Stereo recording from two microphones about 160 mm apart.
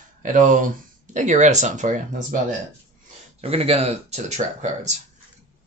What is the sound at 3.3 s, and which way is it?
Speech, 40° right (ahead or behind).